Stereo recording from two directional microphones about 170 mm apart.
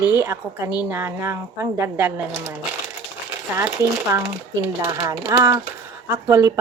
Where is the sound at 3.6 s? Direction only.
15° right (ahead or behind).